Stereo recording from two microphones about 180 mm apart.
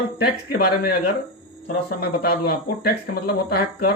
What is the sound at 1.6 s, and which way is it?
Speech, 60° left (ahead or behind).